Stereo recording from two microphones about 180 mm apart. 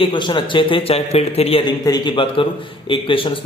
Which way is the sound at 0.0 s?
25° left (ahead or behind).